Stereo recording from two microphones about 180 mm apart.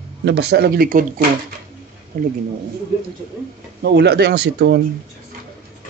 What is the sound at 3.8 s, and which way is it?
Speech, 70° right (ahead or behind).